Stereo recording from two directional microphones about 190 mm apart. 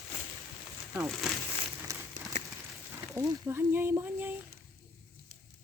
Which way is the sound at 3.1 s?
15° right (ahead or behind).